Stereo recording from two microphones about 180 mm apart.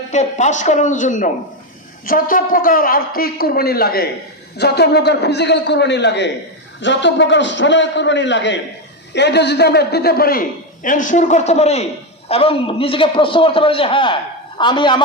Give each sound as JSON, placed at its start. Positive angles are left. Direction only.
{"t": 0.1, "sound": "a man's voice", "side_deg": 40}
{"t": 9.1, "sound": "a man's voice", "side_deg": 70}